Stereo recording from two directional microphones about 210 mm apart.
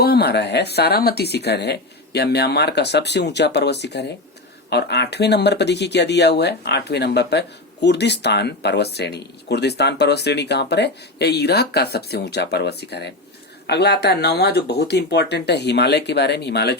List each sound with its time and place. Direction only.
0.0 s speech: 50° left (ahead or behind)